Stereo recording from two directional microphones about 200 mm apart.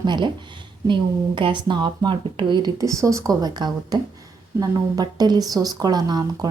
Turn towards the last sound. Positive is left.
turn(degrees=-20)  # may be behind; listen again after turning